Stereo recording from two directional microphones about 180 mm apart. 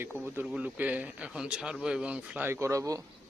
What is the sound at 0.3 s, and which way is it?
Speech, 5° right (ahead or behind).